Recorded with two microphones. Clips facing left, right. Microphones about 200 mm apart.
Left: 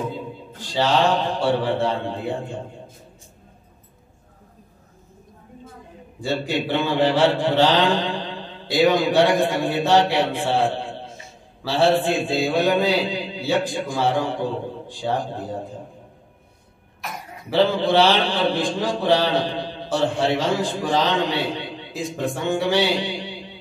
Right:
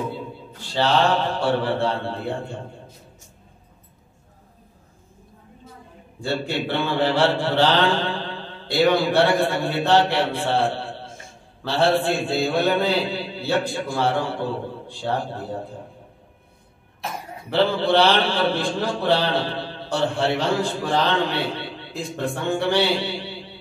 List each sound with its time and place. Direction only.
0.8 s a man's voice: 15° left (ahead or behind)
6.2 s mantra: 15° left (ahead or behind)
8.9 s a man's voice: 15° left (ahead or behind)
11.1 s a sound: 50° right (ahead or behind)
11.7 s a man's voice: 15° left (ahead or behind)
17.5 s a man's voice: 15° left (ahead or behind)
22.8 s a sound: 15° left (ahead or behind)